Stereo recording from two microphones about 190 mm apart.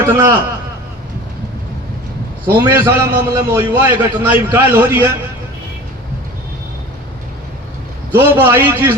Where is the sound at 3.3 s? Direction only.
15° right (ahead or behind).